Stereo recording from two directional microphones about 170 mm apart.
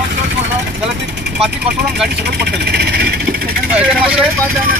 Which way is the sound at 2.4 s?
70° right (ahead or behind).